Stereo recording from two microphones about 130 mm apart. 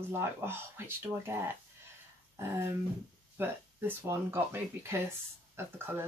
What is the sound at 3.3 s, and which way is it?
Speech, 15° right (ahead or behind).